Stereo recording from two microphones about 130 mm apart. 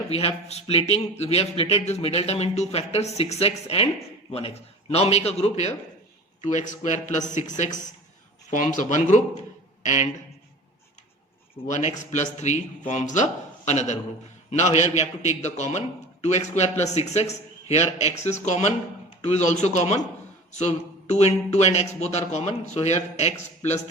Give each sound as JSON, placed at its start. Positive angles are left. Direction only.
{"t": 0.1, "sound": "speech", "side_deg": 50}
{"t": 11.7, "sound": "speech", "side_deg": 65}